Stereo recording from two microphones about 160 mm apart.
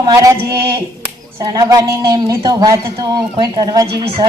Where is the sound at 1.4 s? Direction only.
25° right (ahead or behind).